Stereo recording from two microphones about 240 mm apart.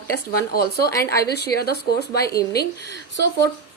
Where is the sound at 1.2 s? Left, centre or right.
Left.